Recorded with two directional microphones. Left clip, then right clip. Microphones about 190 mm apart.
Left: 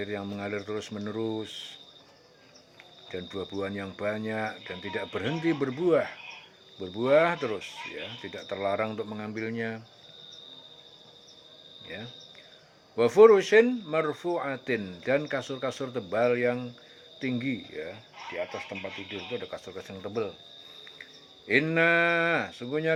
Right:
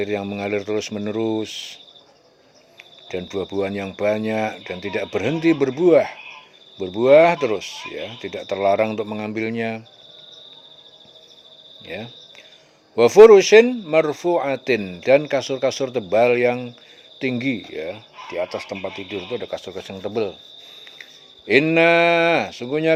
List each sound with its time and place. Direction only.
0.0 s speech: 40° right (ahead or behind)
3.1 s speech: 50° right (ahead or behind)
13.0 s speech: 35° right (ahead or behind)
21.4 s speech: 40° right (ahead or behind)